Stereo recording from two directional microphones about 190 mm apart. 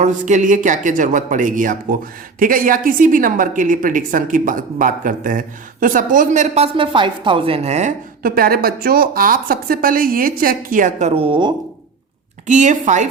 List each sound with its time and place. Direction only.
0.0 s a woman's voice: 40° right (ahead or behind)
11.1 s a woman's voice: 30° right (ahead or behind)
12.5 s a woman's voice: 40° right (ahead or behind)